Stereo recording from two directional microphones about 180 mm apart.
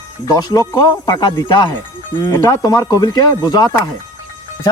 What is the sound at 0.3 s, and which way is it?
Speech, 20° left (ahead or behind).